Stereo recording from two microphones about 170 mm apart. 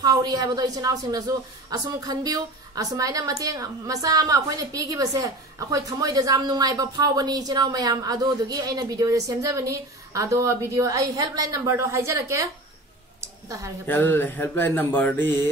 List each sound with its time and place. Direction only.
0.0 s a woman's voice: 20° right (ahead or behind)
13.2 s a sound: 20° right (ahead or behind)
13.8 s speech: 10° left (ahead or behind)